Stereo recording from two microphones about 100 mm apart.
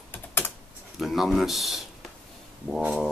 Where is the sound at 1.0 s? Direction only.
Centre (ahead or behind).